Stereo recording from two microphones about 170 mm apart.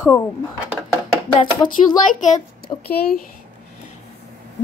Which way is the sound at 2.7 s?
40° left (ahead or behind).